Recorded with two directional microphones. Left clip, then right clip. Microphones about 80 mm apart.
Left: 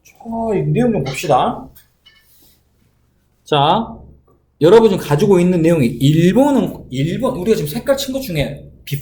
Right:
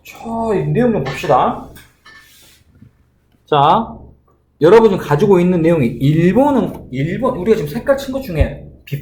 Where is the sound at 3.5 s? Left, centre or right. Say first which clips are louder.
Right 2 dB; left.